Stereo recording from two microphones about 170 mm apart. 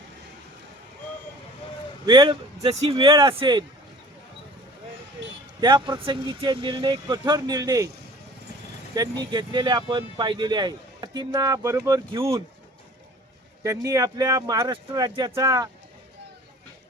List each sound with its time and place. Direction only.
2.0 s speech: 25° right (ahead or behind)
5.5 s speech: 25° right (ahead or behind)
9.0 s speech: 25° right (ahead or behind)
13.6 s speech: 20° right (ahead or behind)